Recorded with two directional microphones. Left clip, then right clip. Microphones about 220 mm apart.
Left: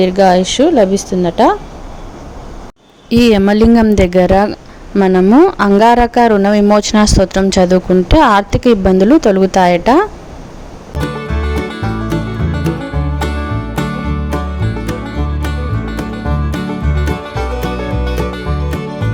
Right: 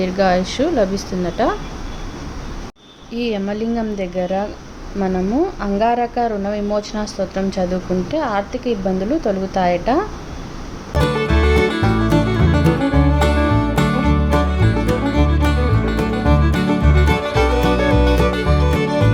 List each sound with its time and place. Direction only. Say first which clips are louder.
0.0 s speech: left 7 dB; 35° left (ahead or behind)
3.1 s speech: left 12 dB; 50° left (ahead or behind)
10.9 s music: right 3 dB; centre (ahead or behind)